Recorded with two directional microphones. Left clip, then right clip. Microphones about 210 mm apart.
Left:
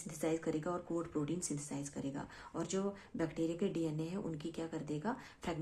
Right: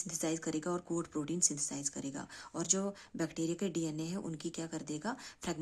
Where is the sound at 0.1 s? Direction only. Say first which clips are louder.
Left 1 dB; 20° right (ahead or behind).